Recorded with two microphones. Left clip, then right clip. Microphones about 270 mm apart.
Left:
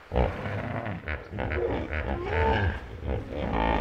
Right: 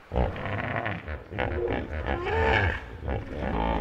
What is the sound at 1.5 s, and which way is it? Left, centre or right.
Music, left.